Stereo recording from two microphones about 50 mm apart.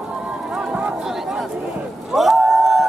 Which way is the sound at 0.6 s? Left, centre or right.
Right.